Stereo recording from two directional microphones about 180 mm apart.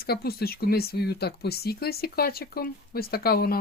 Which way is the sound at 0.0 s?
60° left (ahead or behind).